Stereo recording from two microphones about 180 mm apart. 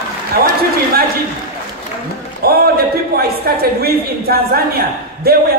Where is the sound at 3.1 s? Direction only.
60° right (ahead or behind).